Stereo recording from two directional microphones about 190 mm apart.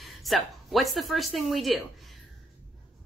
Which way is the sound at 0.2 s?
Centre (ahead or behind).